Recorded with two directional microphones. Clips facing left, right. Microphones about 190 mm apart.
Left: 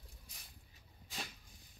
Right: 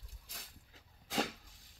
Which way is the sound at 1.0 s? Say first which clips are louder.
Right 13 dB; 90° right.